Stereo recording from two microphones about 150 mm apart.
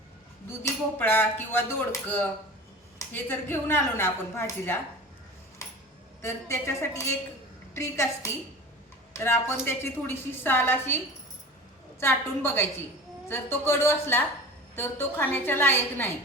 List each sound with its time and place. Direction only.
0.6 s a woman's voice: 15° left (ahead or behind)
6.2 s a woman's voice: 20° left (ahead or behind)
11.9 s a woman's voice: 15° left (ahead or behind)